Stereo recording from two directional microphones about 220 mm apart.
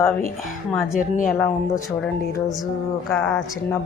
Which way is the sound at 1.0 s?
40° left (ahead or behind).